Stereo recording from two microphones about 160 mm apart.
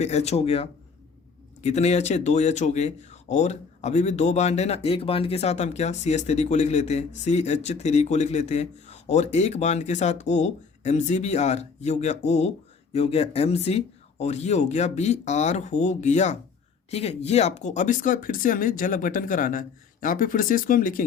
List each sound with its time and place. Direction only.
0.0 s speech: 45° left (ahead or behind); by 21.0 s 60° left (ahead or behind)